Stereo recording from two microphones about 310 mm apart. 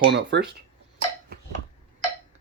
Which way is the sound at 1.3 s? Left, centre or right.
Right.